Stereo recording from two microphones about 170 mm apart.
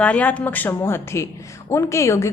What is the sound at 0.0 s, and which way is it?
A woman's voice, 10° left (ahead or behind).